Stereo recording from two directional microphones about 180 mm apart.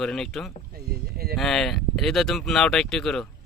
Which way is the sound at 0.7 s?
60° right (ahead or behind).